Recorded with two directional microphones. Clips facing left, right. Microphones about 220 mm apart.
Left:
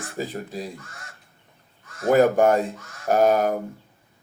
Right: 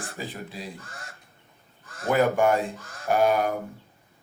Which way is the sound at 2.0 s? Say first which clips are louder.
Left 5 dB; 40° left (ahead or behind).